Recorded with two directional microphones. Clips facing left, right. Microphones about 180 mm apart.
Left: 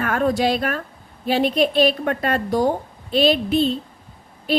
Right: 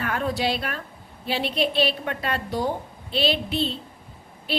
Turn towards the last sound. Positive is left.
turn(degrees=45)  # may be behind; listen again after turning